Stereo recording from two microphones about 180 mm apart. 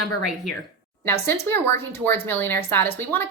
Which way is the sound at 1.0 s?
15° left (ahead or behind).